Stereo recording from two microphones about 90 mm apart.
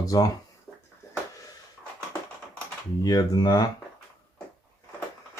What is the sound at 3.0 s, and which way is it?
Speech, 45° left (ahead or behind).